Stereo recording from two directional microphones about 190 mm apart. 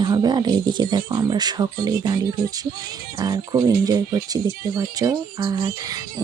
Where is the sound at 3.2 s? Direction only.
20° right (ahead or behind).